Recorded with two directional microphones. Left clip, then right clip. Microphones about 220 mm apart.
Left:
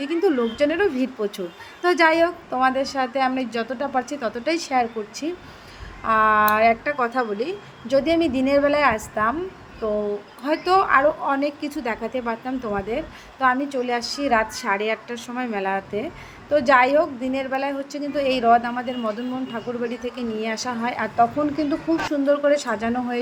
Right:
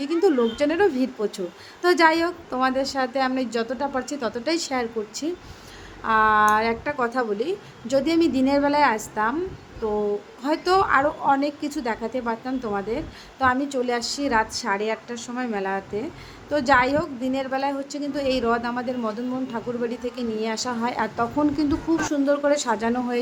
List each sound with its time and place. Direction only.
0.0 s a woman's voice: centre (ahead or behind)
10.4 s a woman's voice: centre (ahead or behind)